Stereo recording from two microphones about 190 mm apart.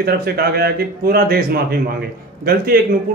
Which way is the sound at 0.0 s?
55° right (ahead or behind).